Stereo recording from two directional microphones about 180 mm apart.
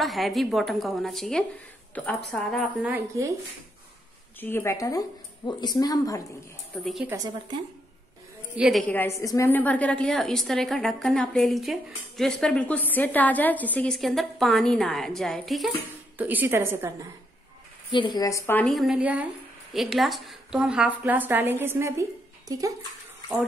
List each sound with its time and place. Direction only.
0.0 s a woman's voice: centre (ahead or behind)
4.4 s a woman's voice: 10° left (ahead or behind)
6.8 s a woman's voice: centre (ahead or behind)
8.5 s a woman's voice: centre (ahead or behind)
8.9 s a woman's voice: 15° left (ahead or behind); by 16.9 s 10° right (ahead or behind)
17.9 s speech: 25° left (ahead or behind)
18.7 s a woman's voice: centre (ahead or behind); by 22.8 s 20° right (ahead or behind)